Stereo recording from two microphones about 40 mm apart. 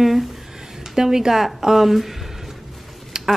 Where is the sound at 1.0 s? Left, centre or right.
Centre.